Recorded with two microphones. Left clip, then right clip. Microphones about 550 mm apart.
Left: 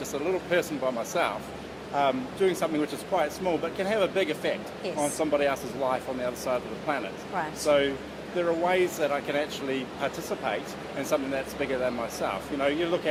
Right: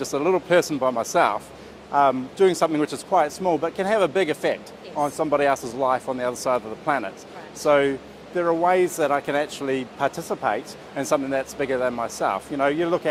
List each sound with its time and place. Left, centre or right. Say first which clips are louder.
0.0 s speech: right 7 dB; right